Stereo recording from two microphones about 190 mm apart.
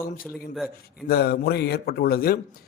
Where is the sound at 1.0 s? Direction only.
55° left (ahead or behind).